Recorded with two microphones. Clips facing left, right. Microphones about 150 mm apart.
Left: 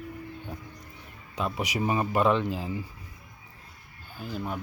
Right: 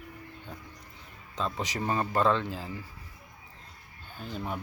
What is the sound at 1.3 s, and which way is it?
Speech, 15° left (ahead or behind).